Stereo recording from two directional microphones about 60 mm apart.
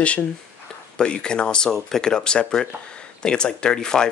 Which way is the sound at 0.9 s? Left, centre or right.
Centre.